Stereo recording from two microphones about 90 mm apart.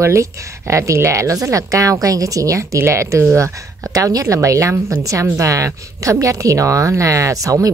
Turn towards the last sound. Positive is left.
turn(degrees=-40)  # may be behind; listen again after turning